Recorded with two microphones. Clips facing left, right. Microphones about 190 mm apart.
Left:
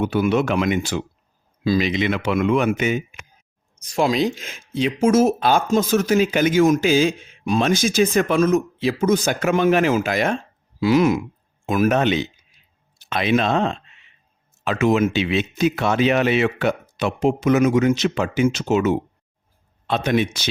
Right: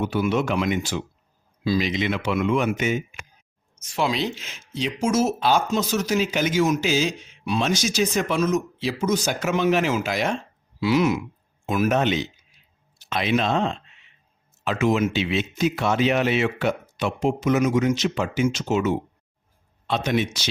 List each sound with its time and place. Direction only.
0.0 s speech: 60° left (ahead or behind)
1.6 s speech: 55° left (ahead or behind)
3.8 s speech: 40° left (ahead or behind); by 18.9 s 70° left (ahead or behind)
19.9 s speech: 55° left (ahead or behind)